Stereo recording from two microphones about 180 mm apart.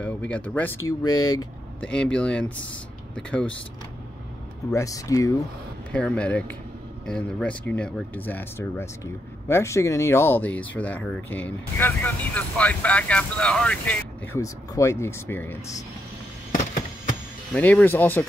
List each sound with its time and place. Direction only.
0.0 s speech: 5° left (ahead or behind)
1.8 s speech: 5° left (ahead or behind)
4.6 s speech: 20° left (ahead or behind)
5.9 s speech: 5° left (ahead or behind)
17.6 s speech: 10° left (ahead or behind)